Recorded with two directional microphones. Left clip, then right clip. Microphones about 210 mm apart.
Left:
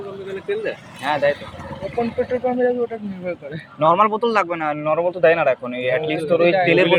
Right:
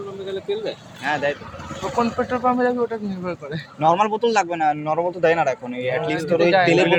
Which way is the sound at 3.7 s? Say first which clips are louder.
Left 2 dB; 30° right (ahead or behind).